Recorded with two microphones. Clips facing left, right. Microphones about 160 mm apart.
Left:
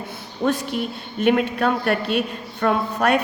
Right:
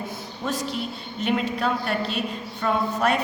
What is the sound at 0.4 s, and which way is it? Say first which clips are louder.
A man's voice: left 6 dB; 60° left (ahead or behind).